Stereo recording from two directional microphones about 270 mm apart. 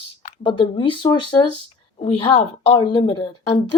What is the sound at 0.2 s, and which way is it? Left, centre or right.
A woman's voice, centre.